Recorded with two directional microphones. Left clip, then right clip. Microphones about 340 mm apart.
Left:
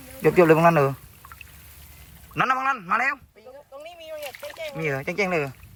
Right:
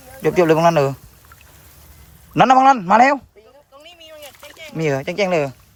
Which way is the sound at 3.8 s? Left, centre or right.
Centre.